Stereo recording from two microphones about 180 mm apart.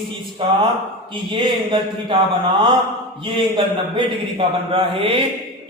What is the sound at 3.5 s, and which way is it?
A man's voice, 30° right (ahead or behind).